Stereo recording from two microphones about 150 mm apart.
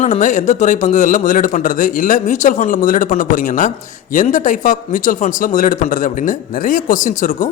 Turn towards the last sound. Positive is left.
turn(degrees=60)  # may be behind; listen again after turning